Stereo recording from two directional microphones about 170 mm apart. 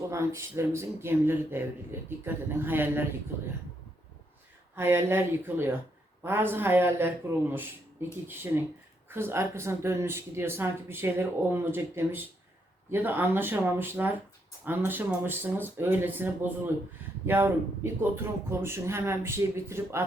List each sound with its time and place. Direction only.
0.1 s speech: 15° right (ahead or behind)
4.7 s speech: 15° right (ahead or behind)